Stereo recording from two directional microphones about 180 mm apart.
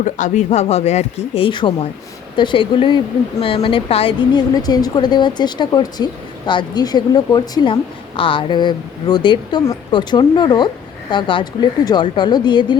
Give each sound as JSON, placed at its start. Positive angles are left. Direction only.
{"t": 0.0, "sound": "a woman's voice", "side_deg": 40}